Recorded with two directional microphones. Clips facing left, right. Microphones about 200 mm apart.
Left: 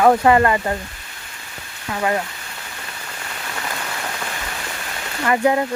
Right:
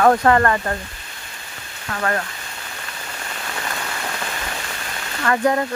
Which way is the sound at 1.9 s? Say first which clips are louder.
Left 2 dB; 15° left (ahead or behind).